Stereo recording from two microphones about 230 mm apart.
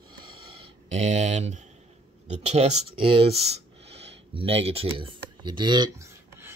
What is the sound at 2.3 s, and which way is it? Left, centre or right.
Speech, right.